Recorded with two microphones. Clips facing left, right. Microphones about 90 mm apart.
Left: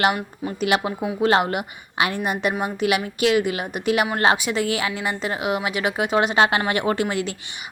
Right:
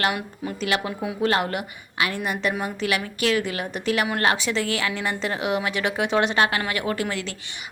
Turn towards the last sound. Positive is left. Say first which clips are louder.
# left 4 dB
turn(degrees=15)  # may be behind; listen again after turning